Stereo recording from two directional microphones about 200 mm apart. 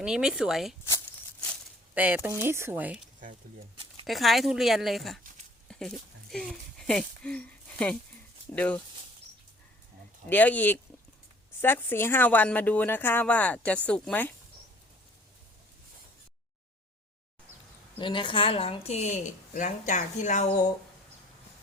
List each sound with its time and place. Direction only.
0.0 s speech: 5° right (ahead or behind)
0.9 s a sound: 10° left (ahead or behind)
2.0 s speech: 5° right (ahead or behind)
4.0 s speech: centre (ahead or behind)
6.3 s speech: centre (ahead or behind)
10.2 s speech: 10° left (ahead or behind)
18.0 s a woman's voice: 25° left (ahead or behind)